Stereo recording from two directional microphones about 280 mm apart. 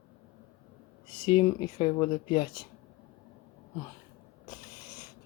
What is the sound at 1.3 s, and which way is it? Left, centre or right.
Speech, centre.